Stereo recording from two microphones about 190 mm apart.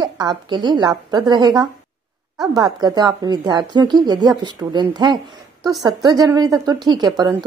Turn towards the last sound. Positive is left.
turn(degrees=-20)  # may be behind; listen again after turning